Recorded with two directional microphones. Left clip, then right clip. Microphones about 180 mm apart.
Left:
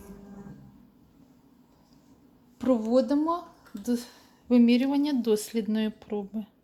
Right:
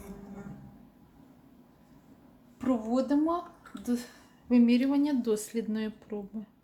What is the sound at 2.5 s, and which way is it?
A woman's voice, 40° left (ahead or behind).